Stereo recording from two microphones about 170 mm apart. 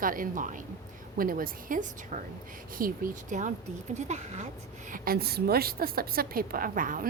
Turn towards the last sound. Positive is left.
turn(degrees=-55)  # may be behind; listen again after turning